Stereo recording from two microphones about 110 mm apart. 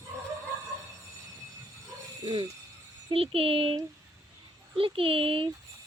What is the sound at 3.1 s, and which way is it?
A child's voice, 55° right (ahead or behind).